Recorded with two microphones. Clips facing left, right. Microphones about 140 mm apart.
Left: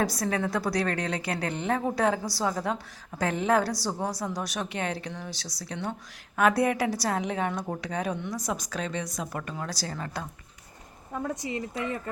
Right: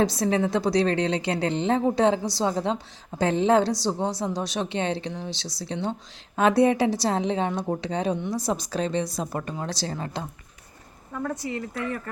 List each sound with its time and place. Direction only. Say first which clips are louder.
0.0 s a woman's voice: right 5 dB; 25° right (ahead or behind)
11.1 s speech: right 2 dB; 20° left (ahead or behind)